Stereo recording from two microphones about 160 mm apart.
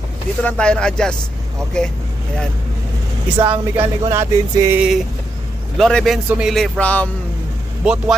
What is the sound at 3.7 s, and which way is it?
Speech, 35° right (ahead or behind).